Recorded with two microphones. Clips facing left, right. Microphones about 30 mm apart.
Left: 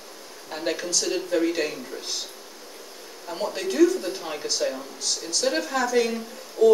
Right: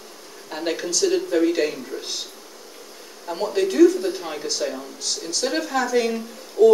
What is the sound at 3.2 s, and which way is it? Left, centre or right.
Speech, centre.